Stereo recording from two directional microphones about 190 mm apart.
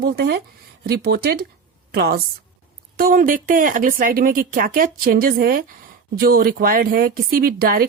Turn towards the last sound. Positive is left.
turn(degrees=-50)  # may be behind; listen again after turning